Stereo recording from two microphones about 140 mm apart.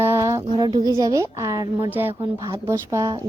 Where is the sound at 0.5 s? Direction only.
30° right (ahead or behind).